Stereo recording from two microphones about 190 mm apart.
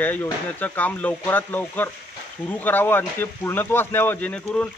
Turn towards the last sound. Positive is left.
turn(degrees=5)  # may be behind; listen again after turning